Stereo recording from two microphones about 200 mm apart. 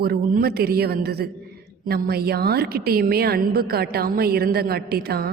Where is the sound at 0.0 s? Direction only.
50° right (ahead or behind).